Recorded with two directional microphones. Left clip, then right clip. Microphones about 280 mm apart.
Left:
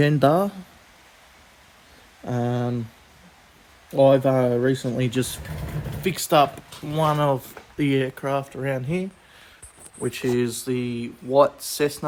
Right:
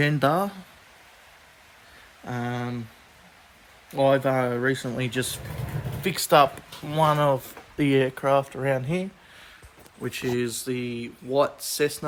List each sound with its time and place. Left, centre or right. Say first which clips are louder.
0.0 s speech: left 4 dB; centre
2.2 s speech: left 5 dB; centre
3.9 s speech: left 4 dB; centre
10.0 s speech: left 4 dB; centre